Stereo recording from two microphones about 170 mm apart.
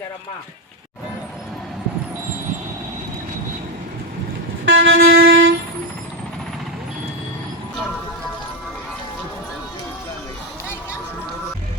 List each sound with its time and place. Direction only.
4.7 s train: 80° right